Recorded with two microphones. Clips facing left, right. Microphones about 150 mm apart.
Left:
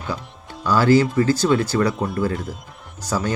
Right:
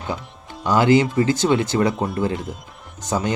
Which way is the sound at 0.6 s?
20° right (ahead or behind).